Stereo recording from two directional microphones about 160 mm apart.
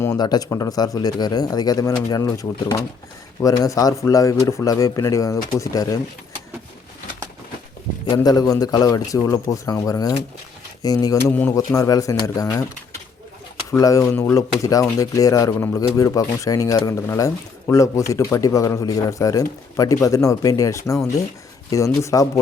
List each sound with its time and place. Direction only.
0.2 s speech: 25° left (ahead or behind)
8.1 s speech: 25° left (ahead or behind)
11.3 s speech: 10° left (ahead or behind)
11.5 s speech: 20° left (ahead or behind)
13.7 s speech: 20° left (ahead or behind)